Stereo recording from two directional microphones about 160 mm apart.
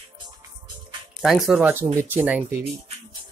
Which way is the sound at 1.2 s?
Centre (ahead or behind).